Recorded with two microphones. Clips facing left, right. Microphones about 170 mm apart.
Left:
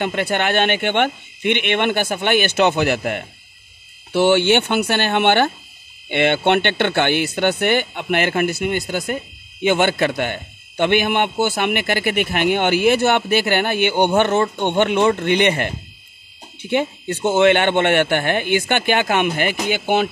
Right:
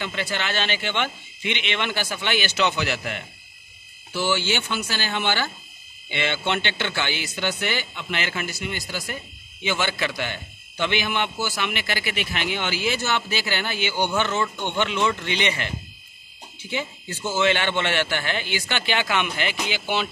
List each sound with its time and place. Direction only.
0.0 s speech: 55° left (ahead or behind)